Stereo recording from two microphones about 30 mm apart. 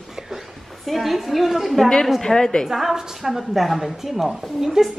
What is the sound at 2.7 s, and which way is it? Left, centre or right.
A woman's voice, centre.